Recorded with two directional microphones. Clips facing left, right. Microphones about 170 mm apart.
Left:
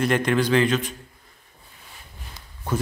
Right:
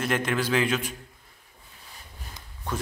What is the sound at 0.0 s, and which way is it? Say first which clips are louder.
Speech: left 5 dB; centre (ahead or behind).